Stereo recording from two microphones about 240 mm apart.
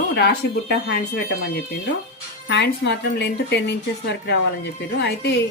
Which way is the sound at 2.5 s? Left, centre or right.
Left.